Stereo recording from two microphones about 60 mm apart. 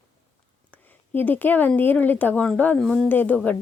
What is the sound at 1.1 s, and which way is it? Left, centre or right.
Speech, left.